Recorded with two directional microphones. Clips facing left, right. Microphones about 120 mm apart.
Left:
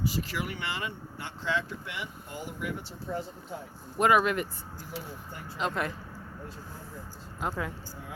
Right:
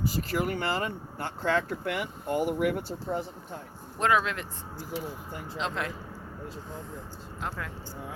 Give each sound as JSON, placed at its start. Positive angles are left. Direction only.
{"t": 0.1, "sound": "speech", "side_deg": -45}
{"t": 3.5, "sound": "speech", "side_deg": 10}
{"t": 5.5, "sound": "speech", "side_deg": 5}
{"t": 7.4, "sound": "speech", "side_deg": 10}